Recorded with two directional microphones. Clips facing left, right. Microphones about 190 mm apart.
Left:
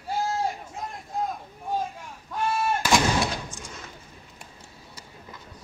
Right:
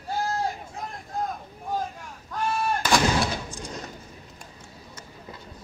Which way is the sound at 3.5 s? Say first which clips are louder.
Right 5 dB; 35° right (ahead or behind).